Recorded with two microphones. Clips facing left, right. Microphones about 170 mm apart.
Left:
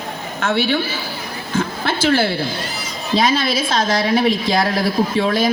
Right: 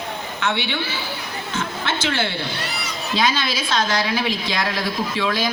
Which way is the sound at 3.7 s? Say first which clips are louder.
Left 3 dB; 35° left (ahead or behind).